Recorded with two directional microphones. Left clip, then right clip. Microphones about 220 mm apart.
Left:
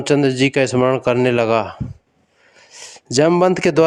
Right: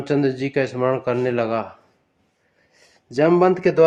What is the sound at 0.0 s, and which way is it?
Speech, 40° left (ahead or behind).